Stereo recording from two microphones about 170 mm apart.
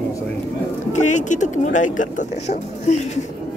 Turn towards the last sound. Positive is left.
turn(degrees=45)  # may be behind; listen again after turning